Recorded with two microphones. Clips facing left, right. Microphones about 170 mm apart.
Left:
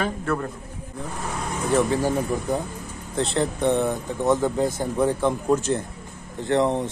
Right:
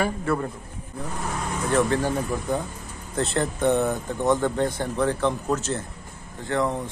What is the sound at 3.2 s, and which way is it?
Speech, centre (ahead or behind).